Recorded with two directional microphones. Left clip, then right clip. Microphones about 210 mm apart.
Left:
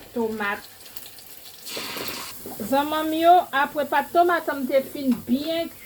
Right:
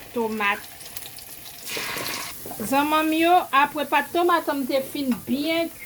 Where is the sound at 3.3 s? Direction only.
55° right (ahead or behind).